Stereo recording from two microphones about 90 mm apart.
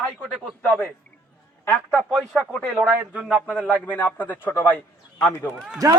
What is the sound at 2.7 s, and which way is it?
Speech, 20° right (ahead or behind).